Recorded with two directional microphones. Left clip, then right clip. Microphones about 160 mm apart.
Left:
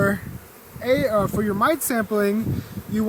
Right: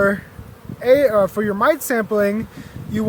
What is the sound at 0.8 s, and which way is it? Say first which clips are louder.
Speech: right 6 dB; 50° right (ahead or behind).